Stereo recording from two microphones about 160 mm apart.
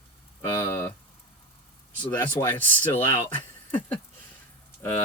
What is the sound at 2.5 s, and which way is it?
Speech, 10° left (ahead or behind).